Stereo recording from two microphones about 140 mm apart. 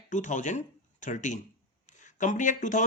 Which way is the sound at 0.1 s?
60° left (ahead or behind).